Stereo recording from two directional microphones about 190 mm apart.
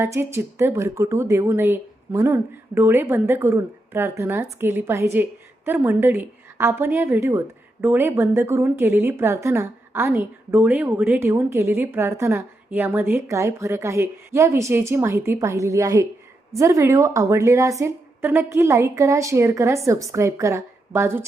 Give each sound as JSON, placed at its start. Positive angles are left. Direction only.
{"t": 0.0, "sound": "a woman's voice", "side_deg": -15}